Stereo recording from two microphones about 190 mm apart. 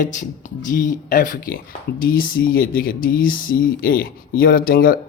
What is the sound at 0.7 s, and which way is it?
A man's voice, 45° left (ahead or behind).